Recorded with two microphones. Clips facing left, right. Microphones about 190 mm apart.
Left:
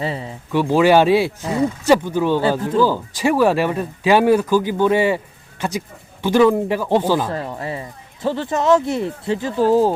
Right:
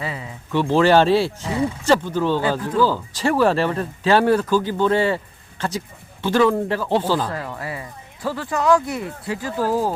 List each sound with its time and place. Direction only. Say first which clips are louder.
0.0 s speech: left 5 dB; 30° left (ahead or behind)
0.5 s speech: left 2 dB; 10° left (ahead or behind); by 9.9 s 25° left (ahead or behind)